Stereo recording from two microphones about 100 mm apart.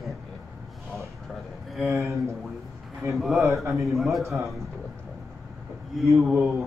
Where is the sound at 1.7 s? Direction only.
Centre (ahead or behind).